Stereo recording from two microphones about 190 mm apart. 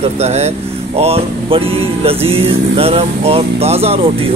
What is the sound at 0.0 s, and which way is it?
Music, 35° right (ahead or behind).